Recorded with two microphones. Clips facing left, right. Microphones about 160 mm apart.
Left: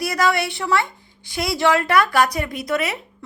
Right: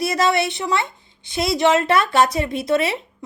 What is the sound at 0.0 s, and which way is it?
A woman's voice, 25° right (ahead or behind).